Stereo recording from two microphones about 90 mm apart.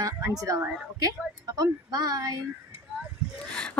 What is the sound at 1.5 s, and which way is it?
Speech, 45° right (ahead or behind).